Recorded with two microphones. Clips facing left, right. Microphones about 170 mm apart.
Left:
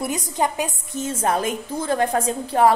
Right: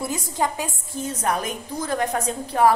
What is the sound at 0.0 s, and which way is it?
A woman's voice, 20° left (ahead or behind).